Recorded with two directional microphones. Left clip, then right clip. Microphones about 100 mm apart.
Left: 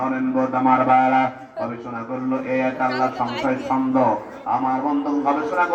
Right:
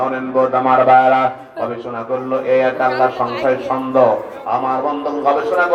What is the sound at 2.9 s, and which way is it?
Speech, 10° right (ahead or behind).